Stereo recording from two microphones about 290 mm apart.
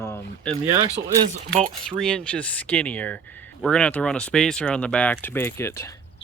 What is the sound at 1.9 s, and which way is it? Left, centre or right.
Speech, centre.